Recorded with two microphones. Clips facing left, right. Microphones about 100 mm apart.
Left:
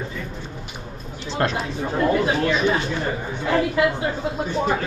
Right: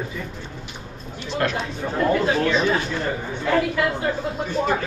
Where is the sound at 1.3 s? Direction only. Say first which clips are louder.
Left 1 dB; 30° left (ahead or behind).